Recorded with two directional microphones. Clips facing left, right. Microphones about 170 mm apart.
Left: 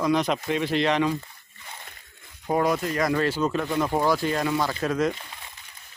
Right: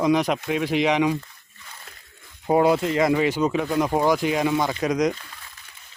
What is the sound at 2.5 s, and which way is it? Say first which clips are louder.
Speech: right 5 dB; 25° right (ahead or behind).